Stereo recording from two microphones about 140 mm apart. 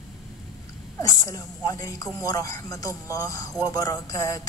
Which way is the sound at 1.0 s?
25° left (ahead or behind).